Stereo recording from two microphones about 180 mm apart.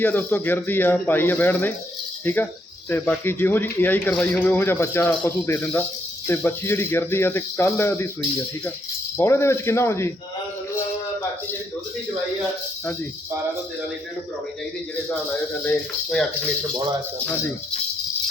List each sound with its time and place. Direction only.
0.0 s speech: 10° left (ahead or behind)
9.1 s speech: 15° left (ahead or behind)